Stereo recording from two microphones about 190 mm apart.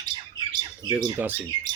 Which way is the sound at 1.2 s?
10° right (ahead or behind).